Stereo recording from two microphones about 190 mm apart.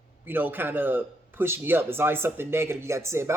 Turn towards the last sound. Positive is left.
turn(degrees=-15)  # may be behind; listen again after turning